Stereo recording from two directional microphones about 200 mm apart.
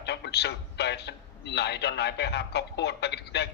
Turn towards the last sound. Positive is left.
turn(degrees=55)  # may be behind; listen again after turning